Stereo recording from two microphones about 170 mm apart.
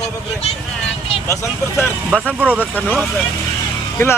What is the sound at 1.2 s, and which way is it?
Speech, 15° left (ahead or behind).